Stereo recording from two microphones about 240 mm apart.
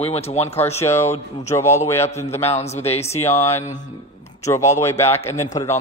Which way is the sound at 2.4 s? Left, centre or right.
Left.